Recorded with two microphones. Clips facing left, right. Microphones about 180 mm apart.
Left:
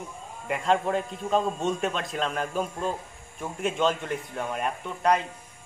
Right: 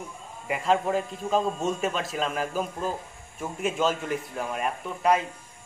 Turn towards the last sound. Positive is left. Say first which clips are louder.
# right 1 dB
turn(degrees=-5)  # may be behind; listen again after turning